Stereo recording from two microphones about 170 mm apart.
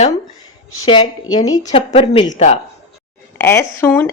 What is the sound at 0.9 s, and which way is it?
Speech, 25° left (ahead or behind).